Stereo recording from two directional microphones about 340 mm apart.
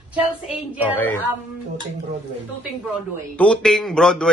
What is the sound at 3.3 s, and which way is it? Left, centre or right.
Speech, centre.